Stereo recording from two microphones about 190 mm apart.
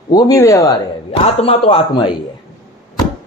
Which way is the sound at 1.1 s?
30° left (ahead or behind).